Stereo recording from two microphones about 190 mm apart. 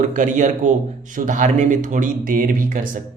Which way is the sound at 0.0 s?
40° right (ahead or behind).